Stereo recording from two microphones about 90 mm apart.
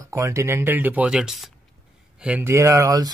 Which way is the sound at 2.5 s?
35° right (ahead or behind).